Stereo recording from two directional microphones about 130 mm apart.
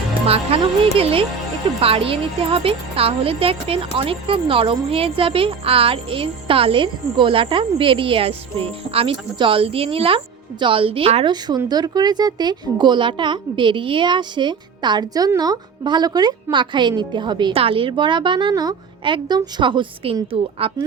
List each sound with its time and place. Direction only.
0.3 s speech: 50° right (ahead or behind)
11.4 s a woman's voice: 30° right (ahead or behind)